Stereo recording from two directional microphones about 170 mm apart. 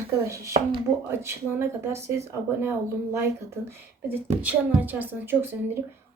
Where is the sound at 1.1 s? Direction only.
15° right (ahead or behind).